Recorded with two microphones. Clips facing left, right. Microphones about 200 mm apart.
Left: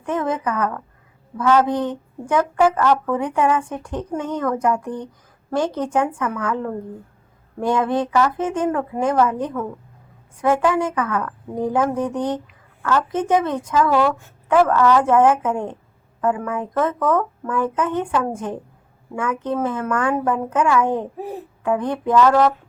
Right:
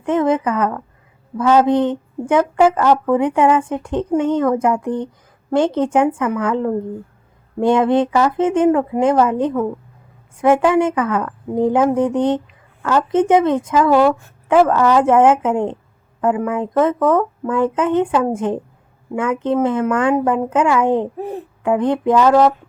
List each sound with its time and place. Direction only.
0.0 s a woman's voice: 25° right (ahead or behind)
21.2 s speech: centre (ahead or behind)
21.6 s a woman's voice: 20° right (ahead or behind)